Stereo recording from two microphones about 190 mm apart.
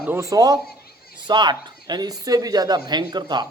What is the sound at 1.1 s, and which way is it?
Speech, 25° right (ahead or behind).